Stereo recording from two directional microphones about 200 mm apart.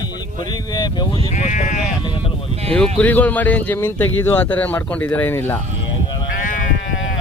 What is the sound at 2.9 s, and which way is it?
Speech, 10° left (ahead or behind).